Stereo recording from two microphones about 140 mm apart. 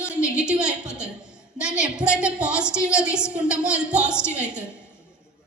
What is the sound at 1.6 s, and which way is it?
A woman's voice, 5° right (ahead or behind).